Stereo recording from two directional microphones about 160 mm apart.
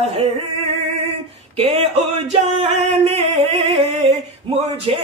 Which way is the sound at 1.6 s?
35° right (ahead or behind).